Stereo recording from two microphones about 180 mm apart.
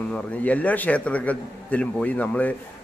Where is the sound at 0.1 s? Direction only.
10° left (ahead or behind).